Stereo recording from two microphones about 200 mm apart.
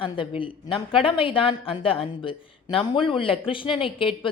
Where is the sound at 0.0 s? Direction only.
25° left (ahead or behind).